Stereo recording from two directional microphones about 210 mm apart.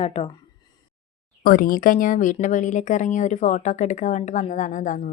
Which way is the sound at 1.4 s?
45° left (ahead or behind).